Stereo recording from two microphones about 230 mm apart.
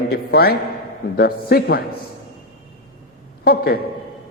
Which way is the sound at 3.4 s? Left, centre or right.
Left.